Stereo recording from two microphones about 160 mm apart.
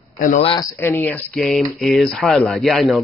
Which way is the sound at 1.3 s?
Centre (ahead or behind).